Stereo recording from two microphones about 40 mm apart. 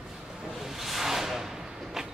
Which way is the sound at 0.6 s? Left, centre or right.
Centre.